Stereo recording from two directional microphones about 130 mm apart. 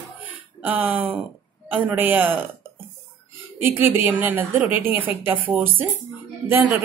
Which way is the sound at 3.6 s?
15° right (ahead or behind).